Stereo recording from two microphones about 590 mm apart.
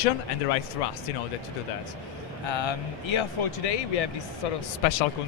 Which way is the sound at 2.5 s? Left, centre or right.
Left.